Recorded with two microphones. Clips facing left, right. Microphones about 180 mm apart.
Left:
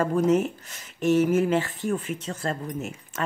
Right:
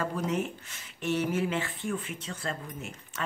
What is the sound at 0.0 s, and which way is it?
Speech, 45° left (ahead or behind).